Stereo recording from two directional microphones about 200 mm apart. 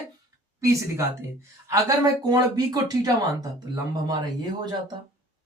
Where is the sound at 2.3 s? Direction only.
20° right (ahead or behind).